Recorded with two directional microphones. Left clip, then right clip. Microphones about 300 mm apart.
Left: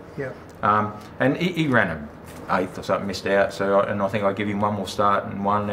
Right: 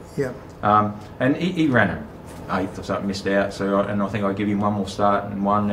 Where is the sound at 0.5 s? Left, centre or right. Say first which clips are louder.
Right 2 dB; left.